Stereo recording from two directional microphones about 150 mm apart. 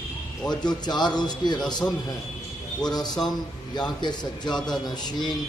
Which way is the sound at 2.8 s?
25° left (ahead or behind).